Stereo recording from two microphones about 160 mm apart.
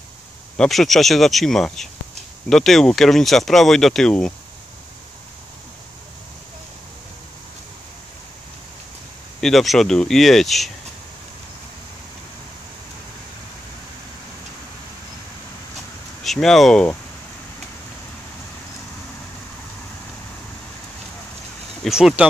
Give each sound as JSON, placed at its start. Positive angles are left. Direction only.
{"t": 0.6, "sound": "speech", "side_deg": 0}
{"t": 9.4, "sound": "speech", "side_deg": 0}
{"t": 16.3, "sound": "speech", "side_deg": 0}
{"t": 21.8, "sound": "speech", "side_deg": 0}